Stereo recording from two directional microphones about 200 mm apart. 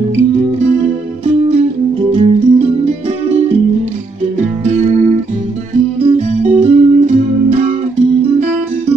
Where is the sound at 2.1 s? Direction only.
30° right (ahead or behind).